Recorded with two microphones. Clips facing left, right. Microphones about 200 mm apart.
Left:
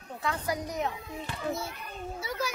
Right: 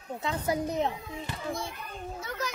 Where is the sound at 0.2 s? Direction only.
25° right (ahead or behind).